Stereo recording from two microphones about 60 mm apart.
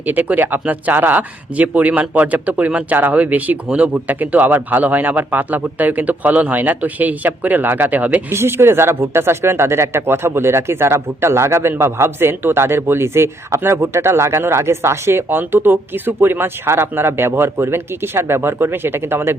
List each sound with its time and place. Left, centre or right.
0.0 s speech: right
8.3 s a man's voice: right